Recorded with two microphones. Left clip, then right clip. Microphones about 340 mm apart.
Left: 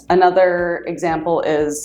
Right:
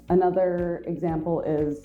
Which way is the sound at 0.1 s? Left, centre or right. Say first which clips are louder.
Left 9 dB; centre.